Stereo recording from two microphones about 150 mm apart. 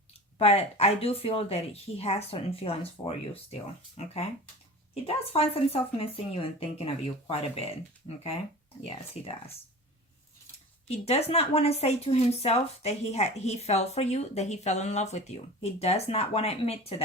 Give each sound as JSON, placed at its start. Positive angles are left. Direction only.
{"t": 0.3, "sound": "a woman's voice", "side_deg": 45}
{"t": 9.2, "sound": "speech", "side_deg": 45}
{"t": 10.8, "sound": "speech", "side_deg": 45}